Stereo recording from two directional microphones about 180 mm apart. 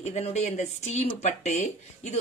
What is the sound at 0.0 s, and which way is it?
Speech, 40° left (ahead or behind).